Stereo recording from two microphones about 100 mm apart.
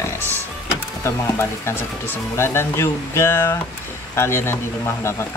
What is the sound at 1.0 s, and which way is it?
Speech, 25° left (ahead or behind).